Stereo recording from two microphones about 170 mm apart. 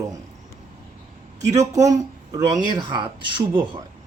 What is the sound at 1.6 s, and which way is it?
Speech, 20° right (ahead or behind).